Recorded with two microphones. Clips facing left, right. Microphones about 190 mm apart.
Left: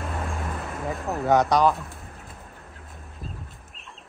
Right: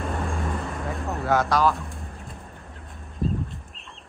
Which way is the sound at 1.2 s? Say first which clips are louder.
Left 2 dB; 20° left (ahead or behind).